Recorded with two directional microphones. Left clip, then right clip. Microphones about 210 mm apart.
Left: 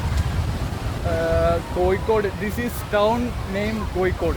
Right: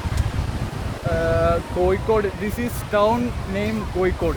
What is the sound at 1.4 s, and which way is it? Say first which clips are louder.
Speech: right 1 dB; 5° right (ahead or behind).